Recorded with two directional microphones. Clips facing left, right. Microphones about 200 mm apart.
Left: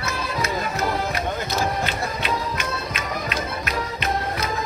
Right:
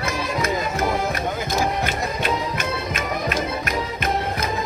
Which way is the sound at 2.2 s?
50° right (ahead or behind).